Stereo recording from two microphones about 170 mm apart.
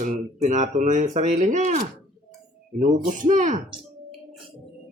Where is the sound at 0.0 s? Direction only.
45° right (ahead or behind).